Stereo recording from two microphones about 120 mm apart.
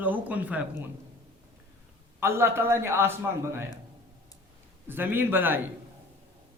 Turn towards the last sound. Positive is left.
turn(degrees=-15)  # may be behind; listen again after turning